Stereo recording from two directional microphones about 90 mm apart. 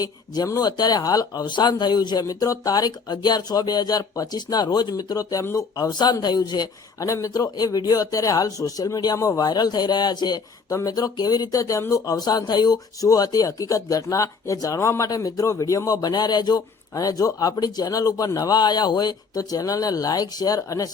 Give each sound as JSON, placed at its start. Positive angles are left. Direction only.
{"t": 0.0, "sound": "speech", "side_deg": 40}